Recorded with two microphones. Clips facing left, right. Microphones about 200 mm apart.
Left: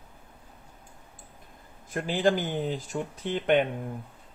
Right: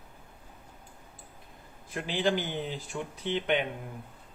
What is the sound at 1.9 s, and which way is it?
Speech, 50° left (ahead or behind).